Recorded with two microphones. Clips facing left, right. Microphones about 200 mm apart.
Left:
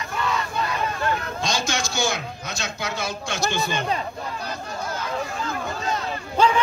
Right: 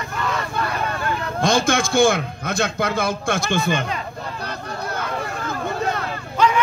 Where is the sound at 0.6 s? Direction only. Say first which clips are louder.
Right 1 dB; 60° right (ahead or behind).